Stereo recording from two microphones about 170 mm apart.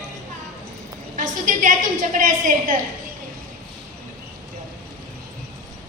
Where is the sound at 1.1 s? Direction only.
50° right (ahead or behind).